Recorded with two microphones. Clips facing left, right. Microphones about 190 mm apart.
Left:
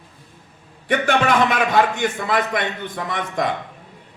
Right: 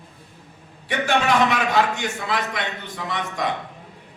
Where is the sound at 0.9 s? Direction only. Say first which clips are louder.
Left 3 dB; 50° left (ahead or behind).